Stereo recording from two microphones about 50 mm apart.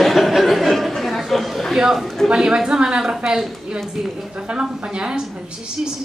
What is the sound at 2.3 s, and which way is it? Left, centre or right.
A woman's voice, centre.